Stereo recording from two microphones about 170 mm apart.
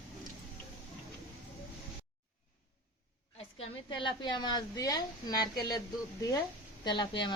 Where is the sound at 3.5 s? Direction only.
30° left (ahead or behind).